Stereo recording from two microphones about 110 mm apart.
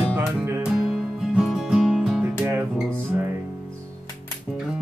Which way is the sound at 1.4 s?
5° right (ahead or behind).